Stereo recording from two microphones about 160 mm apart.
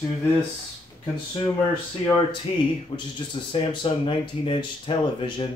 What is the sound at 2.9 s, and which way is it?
Speech, 35° left (ahead or behind).